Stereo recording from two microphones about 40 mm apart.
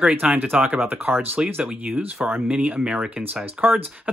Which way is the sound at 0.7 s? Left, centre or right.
Right.